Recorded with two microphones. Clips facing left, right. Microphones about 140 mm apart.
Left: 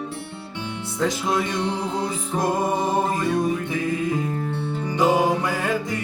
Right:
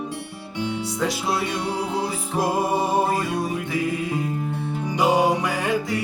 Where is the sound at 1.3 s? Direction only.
10° right (ahead or behind).